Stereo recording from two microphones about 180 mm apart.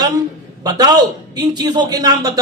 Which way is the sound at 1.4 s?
20° right (ahead or behind).